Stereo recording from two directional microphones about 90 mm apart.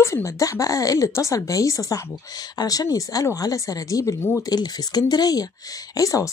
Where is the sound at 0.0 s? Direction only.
35° left (ahead or behind).